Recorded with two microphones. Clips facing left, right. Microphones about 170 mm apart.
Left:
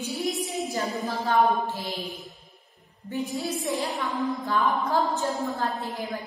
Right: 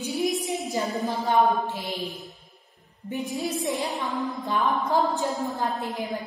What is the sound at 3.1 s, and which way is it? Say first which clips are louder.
Music: right 1 dB; 20° right (ahead or behind).